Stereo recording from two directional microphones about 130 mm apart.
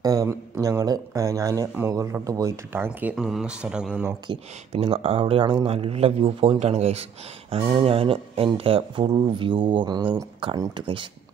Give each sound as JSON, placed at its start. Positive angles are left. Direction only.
{"t": 0.0, "sound": "speech", "side_deg": -25}
{"t": 4.3, "sound": "speech", "side_deg": -45}